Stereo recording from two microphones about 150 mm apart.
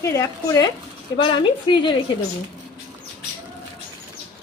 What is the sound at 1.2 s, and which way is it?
Speech, 35° left (ahead or behind).